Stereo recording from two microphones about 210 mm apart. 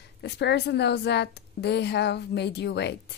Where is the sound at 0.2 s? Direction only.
55° left (ahead or behind).